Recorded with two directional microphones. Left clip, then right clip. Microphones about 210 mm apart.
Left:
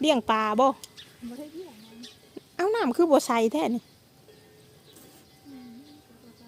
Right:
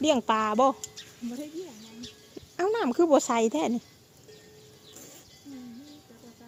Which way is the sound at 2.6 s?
15° left (ahead or behind).